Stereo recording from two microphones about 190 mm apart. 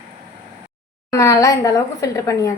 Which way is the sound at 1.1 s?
15° left (ahead or behind).